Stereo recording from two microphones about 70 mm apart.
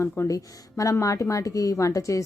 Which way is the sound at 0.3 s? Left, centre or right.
Left.